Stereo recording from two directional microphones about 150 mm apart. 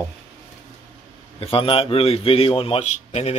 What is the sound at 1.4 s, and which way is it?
A man's voice, 35° left (ahead or behind).